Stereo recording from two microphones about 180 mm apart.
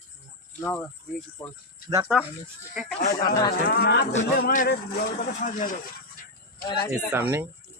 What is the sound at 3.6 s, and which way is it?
Speech, 65° left (ahead or behind).